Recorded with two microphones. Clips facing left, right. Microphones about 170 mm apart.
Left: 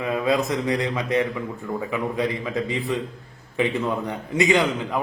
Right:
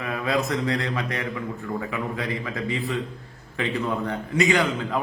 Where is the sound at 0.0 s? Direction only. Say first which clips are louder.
Left 3 dB; 20° left (ahead or behind).